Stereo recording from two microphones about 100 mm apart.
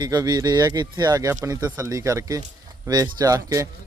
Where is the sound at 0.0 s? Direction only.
40° right (ahead or behind).